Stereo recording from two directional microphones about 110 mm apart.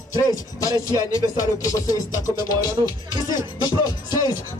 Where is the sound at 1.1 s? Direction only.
30° left (ahead or behind).